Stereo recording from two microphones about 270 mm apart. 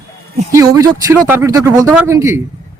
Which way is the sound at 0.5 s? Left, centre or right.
Centre.